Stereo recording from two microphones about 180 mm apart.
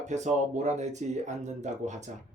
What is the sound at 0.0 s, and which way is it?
A man's voice, 40° right (ahead or behind).